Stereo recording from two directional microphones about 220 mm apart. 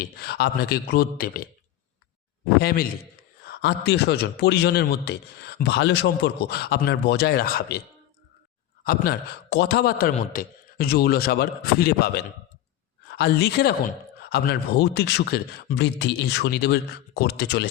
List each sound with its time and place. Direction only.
0.0 s a man's voice: 45° left (ahead or behind)
2.6 s a man's voice: 45° left (ahead or behind)
8.8 s a man's voice: 45° left (ahead or behind)